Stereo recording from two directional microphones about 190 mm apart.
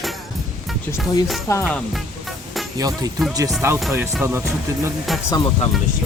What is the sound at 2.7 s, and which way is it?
Speech, 20° right (ahead or behind).